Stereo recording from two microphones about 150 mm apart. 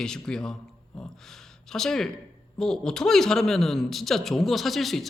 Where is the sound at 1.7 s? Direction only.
5° left (ahead or behind).